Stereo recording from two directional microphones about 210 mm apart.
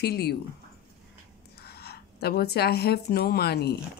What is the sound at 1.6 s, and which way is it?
Speech, 50° left (ahead or behind).